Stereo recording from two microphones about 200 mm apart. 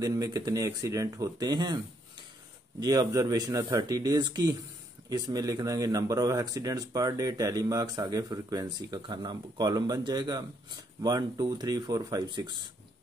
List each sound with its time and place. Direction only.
0.0 s speech: 15° right (ahead or behind)
2.8 s speech: 20° right (ahead or behind)